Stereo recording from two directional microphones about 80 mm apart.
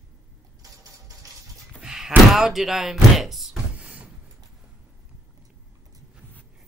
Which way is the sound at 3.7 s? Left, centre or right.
Centre.